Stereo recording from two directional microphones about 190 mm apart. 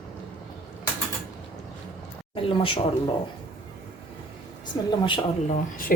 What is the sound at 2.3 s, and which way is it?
Speech, 30° left (ahead or behind).